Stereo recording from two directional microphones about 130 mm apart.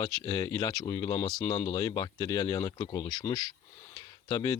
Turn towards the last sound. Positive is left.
turn(degrees=30)  # may be behind; listen again after turning